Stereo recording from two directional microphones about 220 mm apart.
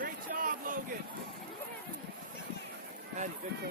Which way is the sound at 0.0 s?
40° right (ahead or behind).